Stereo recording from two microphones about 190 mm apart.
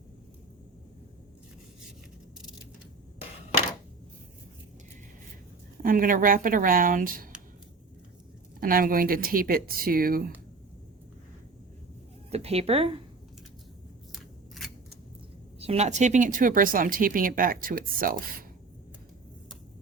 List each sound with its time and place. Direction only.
5.8 s speech: 45° right (ahead or behind)
8.6 s speech: 50° right (ahead or behind)
12.3 s speech: 30° right (ahead or behind)
14.1 s scissors: centre (ahead or behind)
15.5 s speech: 35° right (ahead or behind)